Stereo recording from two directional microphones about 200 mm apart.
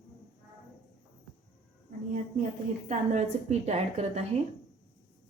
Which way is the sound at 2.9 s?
35° right (ahead or behind).